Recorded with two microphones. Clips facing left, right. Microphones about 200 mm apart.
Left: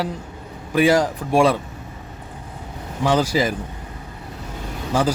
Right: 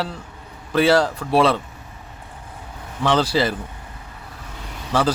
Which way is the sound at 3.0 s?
15° left (ahead or behind).